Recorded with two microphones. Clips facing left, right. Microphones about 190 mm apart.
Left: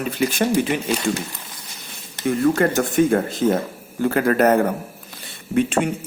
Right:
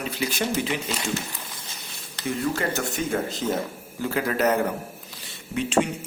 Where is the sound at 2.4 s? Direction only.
55° left (ahead or behind).